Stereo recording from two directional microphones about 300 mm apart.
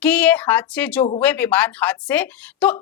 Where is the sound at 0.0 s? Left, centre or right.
Centre.